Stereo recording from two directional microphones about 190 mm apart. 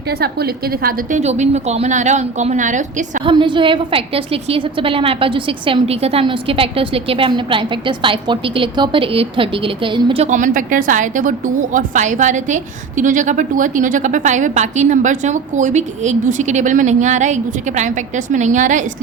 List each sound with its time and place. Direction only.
0.2 s a woman's voice: 55° right (ahead or behind)
1.2 s a woman's voice: 35° right (ahead or behind)
3.2 s a woman's voice: 25° right (ahead or behind)
10.2 s a woman's voice: 40° right (ahead or behind)